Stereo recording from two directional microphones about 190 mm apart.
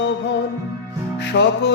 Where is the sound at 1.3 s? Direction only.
70° left (ahead or behind).